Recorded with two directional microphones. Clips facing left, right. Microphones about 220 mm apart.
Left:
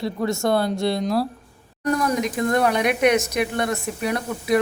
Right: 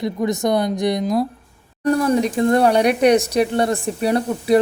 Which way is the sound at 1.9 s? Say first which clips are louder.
Right 5 dB; 30° right (ahead or behind).